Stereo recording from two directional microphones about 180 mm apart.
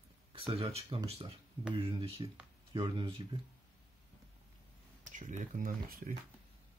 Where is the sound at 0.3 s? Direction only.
30° right (ahead or behind).